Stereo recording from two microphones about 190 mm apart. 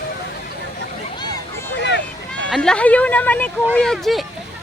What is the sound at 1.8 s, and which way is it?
Vehicle, 65° left (ahead or behind).